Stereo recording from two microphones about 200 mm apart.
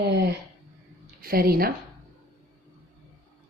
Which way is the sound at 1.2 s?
50° right (ahead or behind).